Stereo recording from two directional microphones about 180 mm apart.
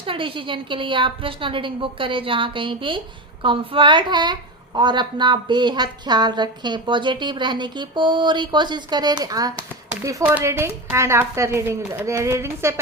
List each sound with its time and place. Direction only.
0.0 s a woman's voice: 30° right (ahead or behind)